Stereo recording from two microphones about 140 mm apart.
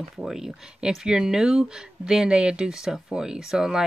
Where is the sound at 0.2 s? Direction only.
5° right (ahead or behind).